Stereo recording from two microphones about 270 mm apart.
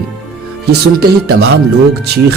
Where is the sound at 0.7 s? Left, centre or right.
Right.